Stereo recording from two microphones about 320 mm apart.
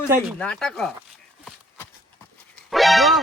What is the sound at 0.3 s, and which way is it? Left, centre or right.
Speech, centre.